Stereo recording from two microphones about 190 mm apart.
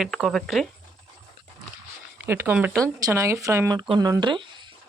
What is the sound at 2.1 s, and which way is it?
Speech, 10° right (ahead or behind).